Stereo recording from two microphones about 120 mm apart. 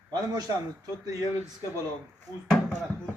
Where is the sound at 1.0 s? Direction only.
30° right (ahead or behind).